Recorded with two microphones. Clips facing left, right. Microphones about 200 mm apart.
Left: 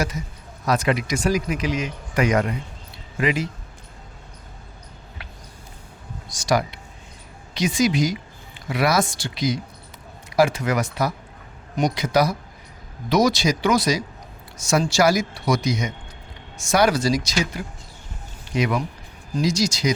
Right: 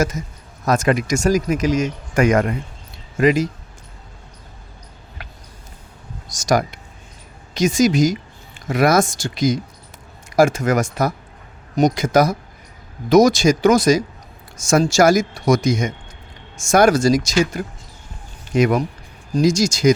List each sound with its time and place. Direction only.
0.6 s speech: 45° right (ahead or behind)
6.2 s a sound: 45° right (ahead or behind)
7.5 s speech: 45° right (ahead or behind)